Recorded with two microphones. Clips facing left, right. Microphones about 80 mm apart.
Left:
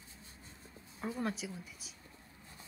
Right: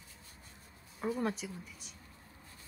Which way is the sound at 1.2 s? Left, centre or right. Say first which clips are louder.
Right 2 dB; centre.